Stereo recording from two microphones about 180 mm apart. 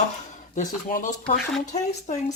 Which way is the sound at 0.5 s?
45° left (ahead or behind).